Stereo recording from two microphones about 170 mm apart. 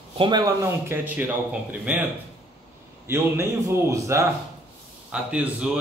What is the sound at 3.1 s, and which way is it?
A man's voice, 15° right (ahead or behind).